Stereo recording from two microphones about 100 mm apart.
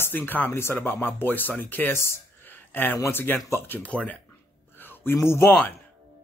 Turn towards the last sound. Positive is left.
turn(degrees=25)  # may be behind; listen again after turning